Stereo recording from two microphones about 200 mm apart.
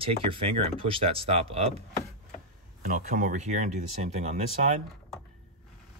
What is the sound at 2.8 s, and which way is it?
Speech, 40° right (ahead or behind).